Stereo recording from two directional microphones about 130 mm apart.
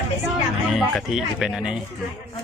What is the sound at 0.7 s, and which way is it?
Speech, centre (ahead or behind).